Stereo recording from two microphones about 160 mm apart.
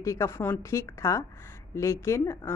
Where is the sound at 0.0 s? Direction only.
20° left (ahead or behind).